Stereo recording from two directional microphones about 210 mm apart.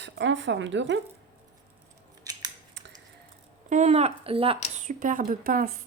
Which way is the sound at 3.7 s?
35° right (ahead or behind).